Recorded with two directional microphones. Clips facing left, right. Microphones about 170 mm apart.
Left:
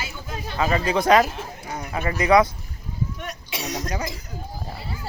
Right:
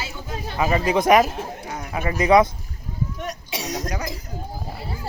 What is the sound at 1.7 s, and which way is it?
Speech, 5° right (ahead or behind).